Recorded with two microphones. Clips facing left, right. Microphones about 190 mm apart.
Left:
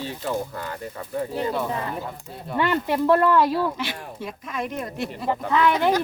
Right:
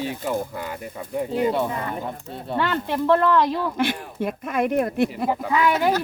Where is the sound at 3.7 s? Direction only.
55° right (ahead or behind).